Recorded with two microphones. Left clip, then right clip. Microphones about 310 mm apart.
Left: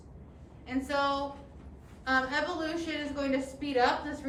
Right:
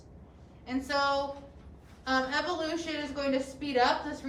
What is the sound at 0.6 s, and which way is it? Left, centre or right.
A woman's voice, centre.